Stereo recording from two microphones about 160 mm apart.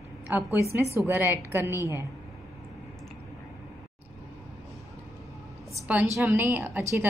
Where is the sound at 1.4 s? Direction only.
15° right (ahead or behind).